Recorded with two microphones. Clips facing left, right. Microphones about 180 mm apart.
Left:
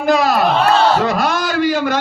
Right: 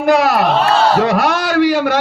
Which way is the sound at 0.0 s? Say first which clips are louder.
Right 2 dB; 70° right (ahead or behind).